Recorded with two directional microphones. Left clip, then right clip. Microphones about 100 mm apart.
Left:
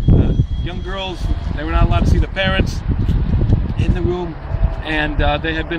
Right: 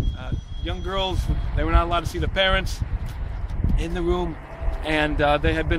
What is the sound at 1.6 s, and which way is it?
Speech, 35° right (ahead or behind).